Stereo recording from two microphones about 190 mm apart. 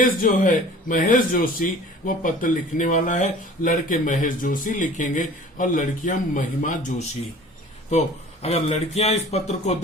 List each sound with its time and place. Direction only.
0.0 s a man's voice: 45° left (ahead or behind)